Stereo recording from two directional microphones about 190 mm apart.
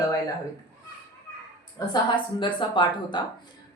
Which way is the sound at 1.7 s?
25° left (ahead or behind).